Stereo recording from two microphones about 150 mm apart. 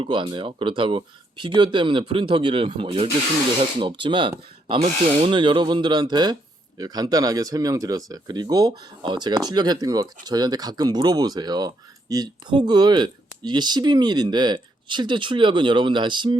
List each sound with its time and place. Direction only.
0.0 s speech: 30° right (ahead or behind)